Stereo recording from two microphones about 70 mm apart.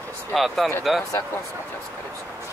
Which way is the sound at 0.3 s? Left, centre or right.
Centre.